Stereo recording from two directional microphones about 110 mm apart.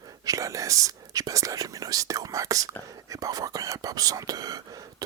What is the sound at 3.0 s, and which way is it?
Speech, 30° right (ahead or behind).